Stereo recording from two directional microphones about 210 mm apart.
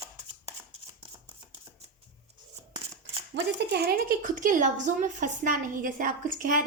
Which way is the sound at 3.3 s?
50° right (ahead or behind).